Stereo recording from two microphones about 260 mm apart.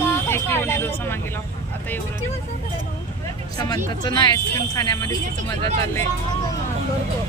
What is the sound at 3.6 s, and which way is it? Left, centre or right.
Speech, centre.